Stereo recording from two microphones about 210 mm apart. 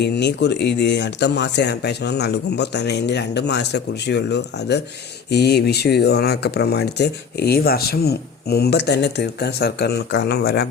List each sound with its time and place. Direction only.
0.0 s speech: 55° left (ahead or behind)